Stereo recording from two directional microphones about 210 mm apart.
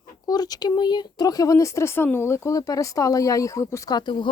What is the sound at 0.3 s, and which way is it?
Speech, 20° left (ahead or behind).